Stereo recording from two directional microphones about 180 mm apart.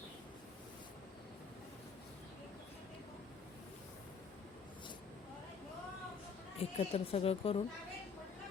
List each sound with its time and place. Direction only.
6.6 s a woman's voice: 35° left (ahead or behind)